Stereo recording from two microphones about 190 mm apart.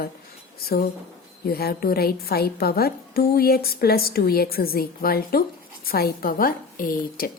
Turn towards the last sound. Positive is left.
turn(degrees=45)  # may be behind; listen again after turning